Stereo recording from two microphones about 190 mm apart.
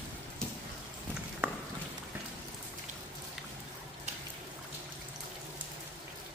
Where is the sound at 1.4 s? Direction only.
10° right (ahead or behind).